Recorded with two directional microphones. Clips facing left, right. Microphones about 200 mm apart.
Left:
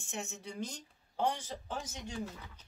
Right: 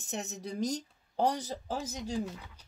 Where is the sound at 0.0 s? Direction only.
40° right (ahead or behind).